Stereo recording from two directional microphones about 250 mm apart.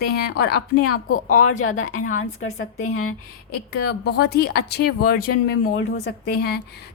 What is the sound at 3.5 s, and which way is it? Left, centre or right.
A woman's voice, left.